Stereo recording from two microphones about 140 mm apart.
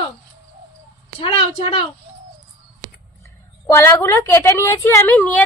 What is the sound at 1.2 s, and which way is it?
Speech, 40° left (ahead or behind).